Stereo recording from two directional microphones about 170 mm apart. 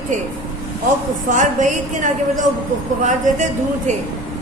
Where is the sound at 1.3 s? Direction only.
50° right (ahead or behind).